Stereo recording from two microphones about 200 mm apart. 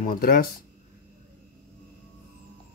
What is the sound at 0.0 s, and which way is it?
Speech, 45° left (ahead or behind).